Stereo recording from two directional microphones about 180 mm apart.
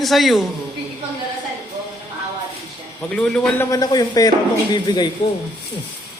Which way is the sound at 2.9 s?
5° left (ahead or behind).